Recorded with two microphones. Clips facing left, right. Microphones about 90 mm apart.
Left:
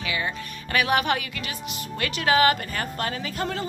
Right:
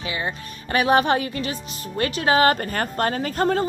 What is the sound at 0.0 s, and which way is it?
A woman's voice, 30° right (ahead or behind).